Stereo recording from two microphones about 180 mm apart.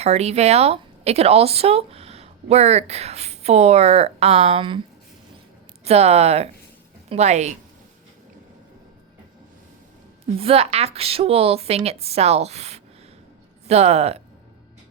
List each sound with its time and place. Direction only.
0.0 s speech: 35° right (ahead or behind)
5.8 s speech: 35° right (ahead or behind)
10.3 s speech: 35° right (ahead or behind)